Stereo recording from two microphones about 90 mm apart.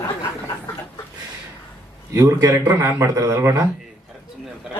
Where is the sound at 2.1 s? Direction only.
35° right (ahead or behind).